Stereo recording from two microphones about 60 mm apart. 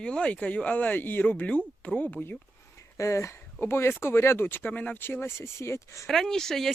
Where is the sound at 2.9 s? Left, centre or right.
Left.